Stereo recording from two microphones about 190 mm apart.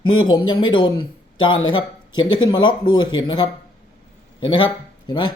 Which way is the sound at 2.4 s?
25° left (ahead or behind).